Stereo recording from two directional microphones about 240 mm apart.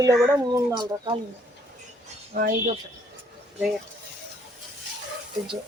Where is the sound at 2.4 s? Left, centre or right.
Right.